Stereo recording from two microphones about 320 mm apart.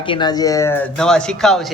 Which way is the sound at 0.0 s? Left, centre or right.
Centre.